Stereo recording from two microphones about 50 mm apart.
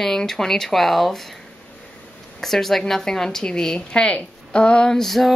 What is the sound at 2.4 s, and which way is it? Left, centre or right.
Speech, centre.